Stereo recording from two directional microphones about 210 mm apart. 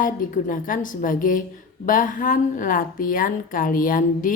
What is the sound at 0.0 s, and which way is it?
A woman's voice, 40° left (ahead or behind).